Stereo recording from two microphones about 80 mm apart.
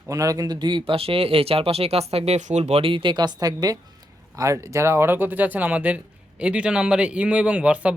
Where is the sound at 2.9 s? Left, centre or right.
Right.